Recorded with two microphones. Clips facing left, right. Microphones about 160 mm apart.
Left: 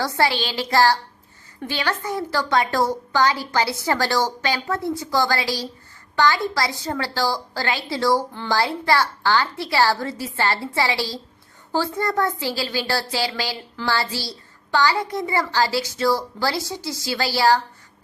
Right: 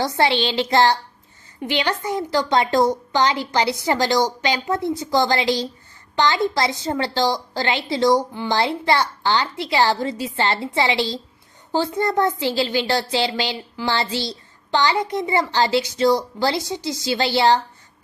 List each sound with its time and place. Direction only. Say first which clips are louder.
0.0 s a woman's voice: right 2 dB; 25° right (ahead or behind)